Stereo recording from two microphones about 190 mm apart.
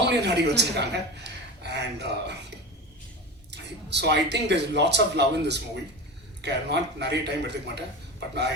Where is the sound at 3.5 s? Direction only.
65° right (ahead or behind).